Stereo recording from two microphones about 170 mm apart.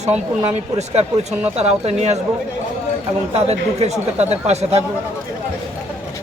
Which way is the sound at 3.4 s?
40° right (ahead or behind).